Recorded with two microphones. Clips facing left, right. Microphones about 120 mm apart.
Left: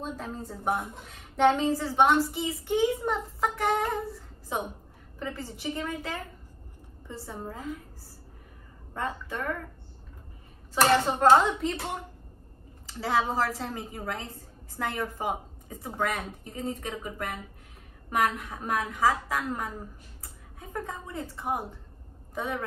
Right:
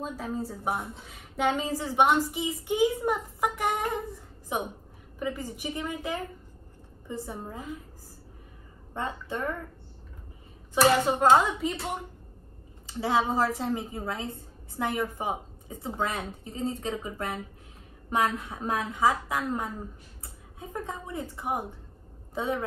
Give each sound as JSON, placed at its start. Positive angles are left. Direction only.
{"t": 0.0, "sound": "a woman's voice", "side_deg": -5}
{"t": 8.9, "sound": "a woman's voice", "side_deg": -25}
{"t": 10.9, "sound": "a woman's voice", "side_deg": -5}
{"t": 12.8, "sound": "a woman's voice", "side_deg": -20}